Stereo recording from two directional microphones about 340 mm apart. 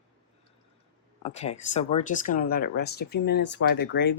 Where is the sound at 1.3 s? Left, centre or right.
Centre.